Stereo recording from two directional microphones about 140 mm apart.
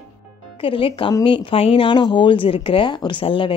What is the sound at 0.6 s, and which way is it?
Speech, 40° left (ahead or behind).